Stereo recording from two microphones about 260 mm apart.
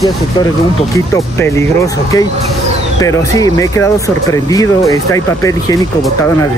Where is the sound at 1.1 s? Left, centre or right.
Centre.